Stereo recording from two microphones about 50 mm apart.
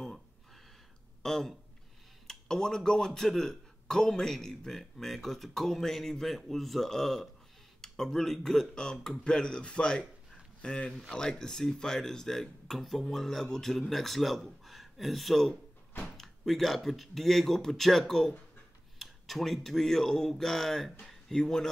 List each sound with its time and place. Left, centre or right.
1.2 s a man's voice: centre